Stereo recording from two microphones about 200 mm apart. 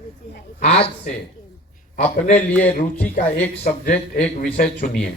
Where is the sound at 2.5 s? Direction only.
10° left (ahead or behind).